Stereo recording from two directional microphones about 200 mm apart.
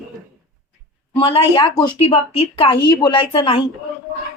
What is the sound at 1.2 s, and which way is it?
A woman's voice, 25° left (ahead or behind).